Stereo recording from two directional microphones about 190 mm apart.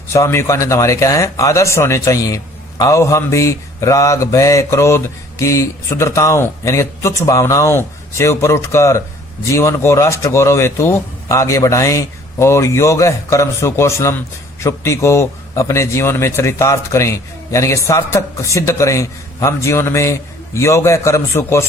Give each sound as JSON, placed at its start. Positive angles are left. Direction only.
{"t": 0.1, "sound": "a man's voice", "side_deg": 15}